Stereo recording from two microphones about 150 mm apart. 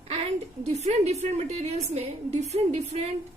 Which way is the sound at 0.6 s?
50° right (ahead or behind).